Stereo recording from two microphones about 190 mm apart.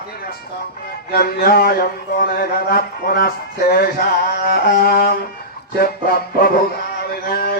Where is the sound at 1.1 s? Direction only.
55° left (ahead or behind).